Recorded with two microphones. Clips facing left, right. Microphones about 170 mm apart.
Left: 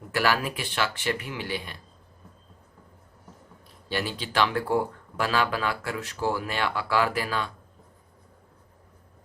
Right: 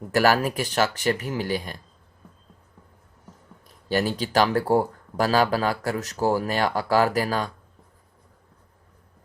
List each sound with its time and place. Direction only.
0.1 s speech: 40° right (ahead or behind)
3.8 s speech: 40° right (ahead or behind)